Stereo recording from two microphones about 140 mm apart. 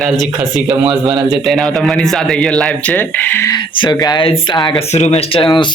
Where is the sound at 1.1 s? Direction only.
35° right (ahead or behind).